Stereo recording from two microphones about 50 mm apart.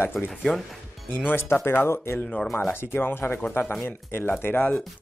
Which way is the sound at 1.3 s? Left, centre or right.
Left.